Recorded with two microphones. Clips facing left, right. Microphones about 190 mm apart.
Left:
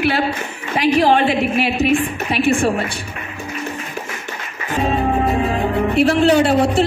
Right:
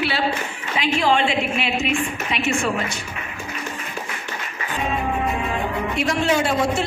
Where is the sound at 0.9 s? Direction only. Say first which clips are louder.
Left 5 dB; 40° left (ahead or behind).